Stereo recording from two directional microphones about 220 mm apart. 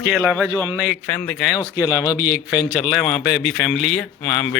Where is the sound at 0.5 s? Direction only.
5° right (ahead or behind).